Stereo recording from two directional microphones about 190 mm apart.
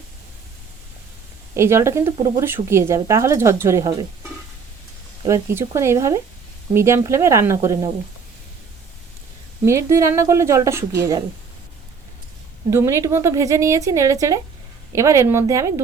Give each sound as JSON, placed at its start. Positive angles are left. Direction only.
{"t": 1.5, "sound": "speech", "side_deg": -15}
{"t": 5.2, "sound": "speech", "side_deg": -15}
{"t": 9.6, "sound": "speech", "side_deg": -15}
{"t": 12.7, "sound": "speech", "side_deg": -15}